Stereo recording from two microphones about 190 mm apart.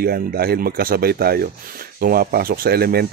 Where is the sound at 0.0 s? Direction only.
50° right (ahead or behind).